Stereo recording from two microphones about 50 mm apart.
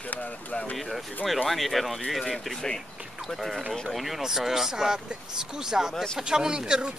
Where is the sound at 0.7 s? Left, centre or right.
Centre.